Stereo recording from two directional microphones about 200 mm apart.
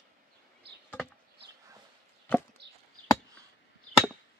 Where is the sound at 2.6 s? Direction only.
60° right (ahead or behind).